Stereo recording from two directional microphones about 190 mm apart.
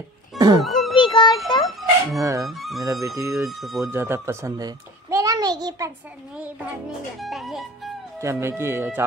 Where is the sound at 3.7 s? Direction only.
15° right (ahead or behind).